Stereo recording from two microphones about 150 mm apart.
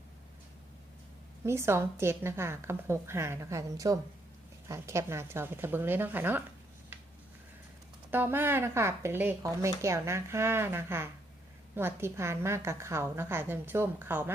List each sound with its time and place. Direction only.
1.5 s speech: 15° right (ahead or behind)
8.1 s speech: 15° right (ahead or behind)